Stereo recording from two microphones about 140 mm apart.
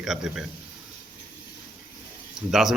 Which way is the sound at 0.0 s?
5° right (ahead or behind).